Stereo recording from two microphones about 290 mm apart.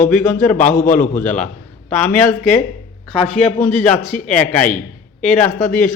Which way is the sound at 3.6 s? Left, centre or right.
Centre.